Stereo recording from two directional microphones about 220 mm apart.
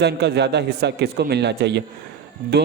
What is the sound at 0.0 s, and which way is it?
A man's voice, 50° right (ahead or behind).